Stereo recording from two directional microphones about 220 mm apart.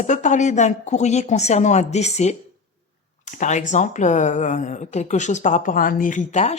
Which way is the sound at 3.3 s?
35° left (ahead or behind).